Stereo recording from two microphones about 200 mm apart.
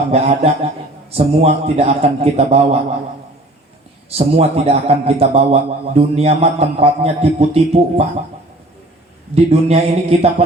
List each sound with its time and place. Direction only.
0.1 s a man's voice: 30° right (ahead or behind)
4.2 s a man's voice: 30° right (ahead or behind)
9.3 s a man's voice: 30° right (ahead or behind)